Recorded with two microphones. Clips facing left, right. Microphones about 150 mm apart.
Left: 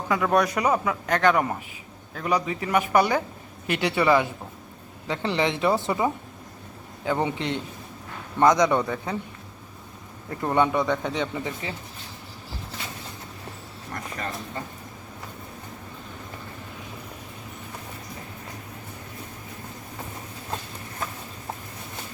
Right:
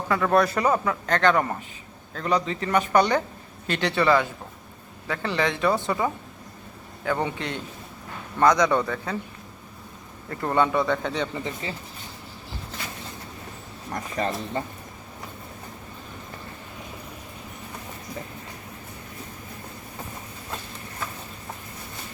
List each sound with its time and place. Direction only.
0.1 s a man's voice: 10° left (ahead or behind)
10.2 s a man's voice: 15° left (ahead or behind)
13.9 s speech: 20° right (ahead or behind)